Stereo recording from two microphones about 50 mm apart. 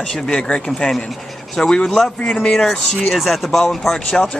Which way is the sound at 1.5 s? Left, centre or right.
Centre.